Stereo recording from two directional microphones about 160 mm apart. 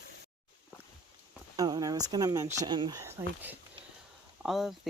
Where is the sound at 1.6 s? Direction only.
25° right (ahead or behind).